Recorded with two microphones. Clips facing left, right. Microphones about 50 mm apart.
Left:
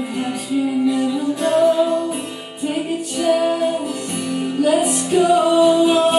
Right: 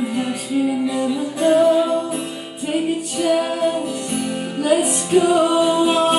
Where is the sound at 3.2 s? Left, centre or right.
Centre.